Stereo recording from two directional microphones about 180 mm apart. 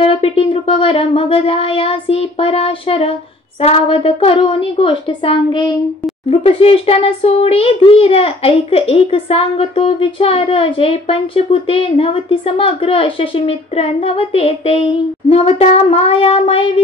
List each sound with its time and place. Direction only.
0.0 s child singing: 30° left (ahead or behind)
3.6 s a child's voice: 30° left (ahead or behind)